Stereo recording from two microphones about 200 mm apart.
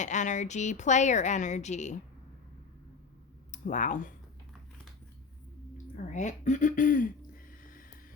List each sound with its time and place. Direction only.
0.0 s speech: 35° left (ahead or behind)
3.5 s speech: 40° left (ahead or behind)
5.7 s speech: 40° left (ahead or behind)
7.6 s music: 45° left (ahead or behind)